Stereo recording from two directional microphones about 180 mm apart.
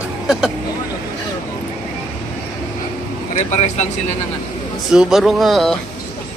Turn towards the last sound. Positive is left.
turn(degrees=0)  # may be behind; listen again after turning